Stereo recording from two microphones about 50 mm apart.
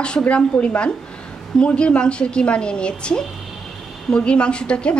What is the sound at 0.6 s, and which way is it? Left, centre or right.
Speech, left.